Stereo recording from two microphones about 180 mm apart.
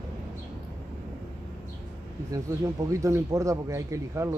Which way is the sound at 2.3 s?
15° right (ahead or behind).